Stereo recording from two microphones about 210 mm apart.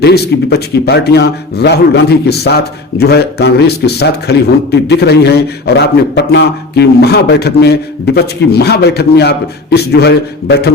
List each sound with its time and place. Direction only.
0.0 s a man's voice: 50° left (ahead or behind)